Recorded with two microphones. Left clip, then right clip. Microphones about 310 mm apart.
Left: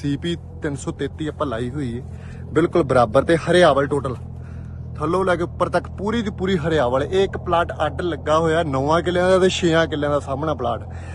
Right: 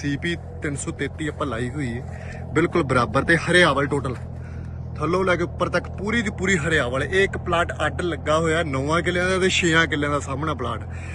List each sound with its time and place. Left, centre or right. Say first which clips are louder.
0.1 s speech: left 1 dB; centre